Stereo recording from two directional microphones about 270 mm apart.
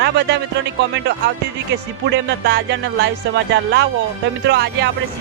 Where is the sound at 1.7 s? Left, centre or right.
Right.